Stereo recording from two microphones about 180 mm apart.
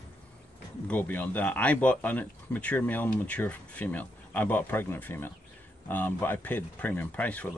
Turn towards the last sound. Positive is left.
turn(degrees=10)  # may be behind; listen again after turning